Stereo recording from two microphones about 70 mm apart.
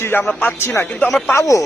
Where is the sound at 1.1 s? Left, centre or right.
Centre.